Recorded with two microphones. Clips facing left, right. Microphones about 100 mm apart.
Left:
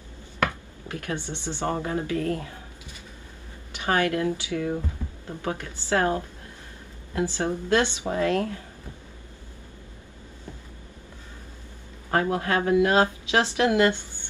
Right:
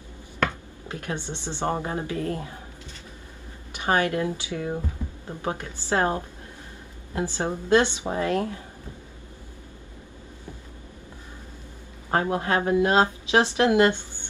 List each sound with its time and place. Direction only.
0.8 s a woman's voice: 20° right (ahead or behind)
3.7 s speech: 20° right (ahead or behind)
5.0 s music: 15° right (ahead or behind)
5.4 s speech: 20° right (ahead or behind)
7.3 s speech: 20° right (ahead or behind)
12.1 s speech: 25° right (ahead or behind)